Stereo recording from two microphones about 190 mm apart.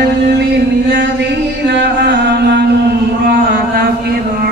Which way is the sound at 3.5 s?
55° right (ahead or behind).